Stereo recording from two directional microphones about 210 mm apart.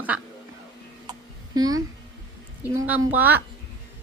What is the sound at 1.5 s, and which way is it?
A woman's voice, 20° right (ahead or behind).